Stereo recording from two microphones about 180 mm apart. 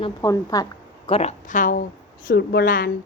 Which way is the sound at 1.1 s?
35° left (ahead or behind).